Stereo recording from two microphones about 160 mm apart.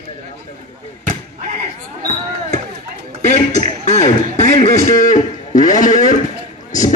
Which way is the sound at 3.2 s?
45° left (ahead or behind).